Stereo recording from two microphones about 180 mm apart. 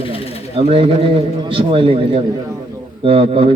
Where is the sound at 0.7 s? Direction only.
30° right (ahead or behind).